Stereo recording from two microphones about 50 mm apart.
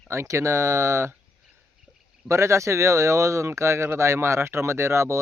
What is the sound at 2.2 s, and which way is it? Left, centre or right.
Speech, right.